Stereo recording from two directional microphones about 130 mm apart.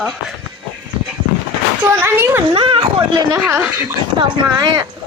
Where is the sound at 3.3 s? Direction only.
15° right (ahead or behind).